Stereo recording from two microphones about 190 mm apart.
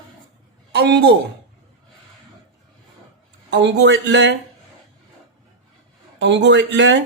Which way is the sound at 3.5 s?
70° right (ahead or behind).